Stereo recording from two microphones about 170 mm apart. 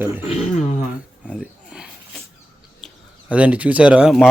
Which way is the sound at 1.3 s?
5° right (ahead or behind).